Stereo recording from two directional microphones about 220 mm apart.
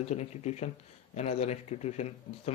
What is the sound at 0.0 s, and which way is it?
A man's voice, 30° left (ahead or behind).